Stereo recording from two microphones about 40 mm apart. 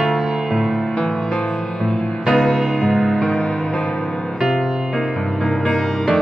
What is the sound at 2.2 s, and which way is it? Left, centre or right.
Music, centre.